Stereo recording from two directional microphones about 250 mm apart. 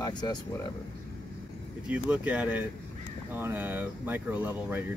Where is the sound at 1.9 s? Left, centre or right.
Centre.